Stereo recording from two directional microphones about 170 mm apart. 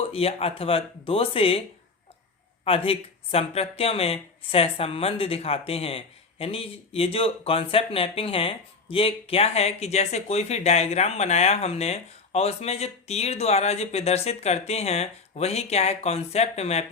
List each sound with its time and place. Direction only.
0.0 s speech: 35° left (ahead or behind)
2.6 s speech: 35° left (ahead or behind)